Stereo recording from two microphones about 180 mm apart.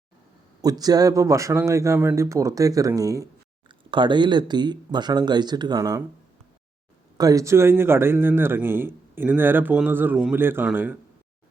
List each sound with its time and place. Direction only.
0.6 s a man's voice: 20° right (ahead or behind)
7.2 s a man's voice: 20° right (ahead or behind)